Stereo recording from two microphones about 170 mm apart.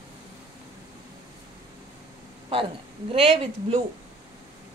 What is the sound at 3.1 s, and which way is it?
Speech, 35° right (ahead or behind).